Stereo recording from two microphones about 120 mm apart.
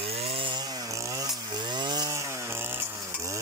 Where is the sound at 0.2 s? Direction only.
45° right (ahead or behind).